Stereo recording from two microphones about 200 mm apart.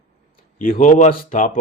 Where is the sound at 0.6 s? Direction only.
45° left (ahead or behind).